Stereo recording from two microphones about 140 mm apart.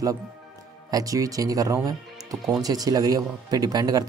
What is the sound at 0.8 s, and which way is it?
Speech, 25° right (ahead or behind).